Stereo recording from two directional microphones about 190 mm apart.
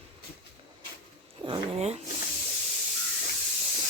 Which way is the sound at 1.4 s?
30° right (ahead or behind).